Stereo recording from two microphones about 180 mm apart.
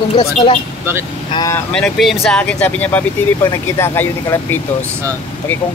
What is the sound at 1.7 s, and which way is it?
Speech, centre (ahead or behind).